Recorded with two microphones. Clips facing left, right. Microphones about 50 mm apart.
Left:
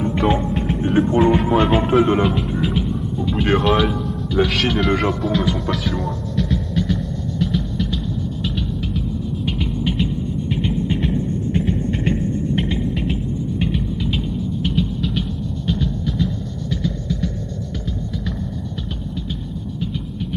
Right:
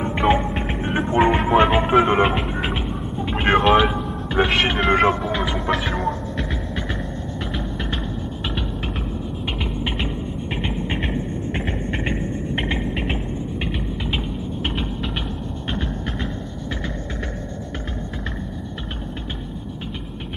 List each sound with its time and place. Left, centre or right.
0.0 s music: right
1.7 s speech: centre
2.2 s music: right
3.6 s music: right
4.3 s speech: right
5.2 s music: right
5.7 s speech: right
6.3 s hum: right
10.5 s music: right
11.5 s hum: right
12.0 s music: right
14.6 s a sound: right
16.8 s hum: right